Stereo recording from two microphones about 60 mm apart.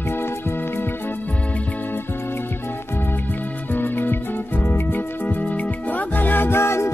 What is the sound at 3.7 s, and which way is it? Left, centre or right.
Music, left.